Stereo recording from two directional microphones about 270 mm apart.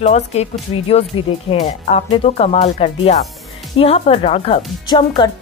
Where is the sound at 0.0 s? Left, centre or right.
Left.